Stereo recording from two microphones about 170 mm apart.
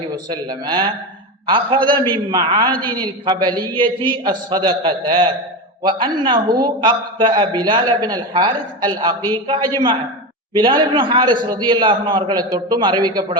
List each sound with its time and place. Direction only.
0.3 s a man's voice: 25° right (ahead or behind)